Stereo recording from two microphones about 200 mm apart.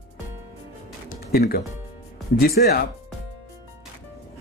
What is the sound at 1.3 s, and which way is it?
Speech, 50° left (ahead or behind).